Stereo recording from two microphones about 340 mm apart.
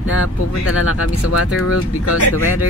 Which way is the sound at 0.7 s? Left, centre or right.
Left.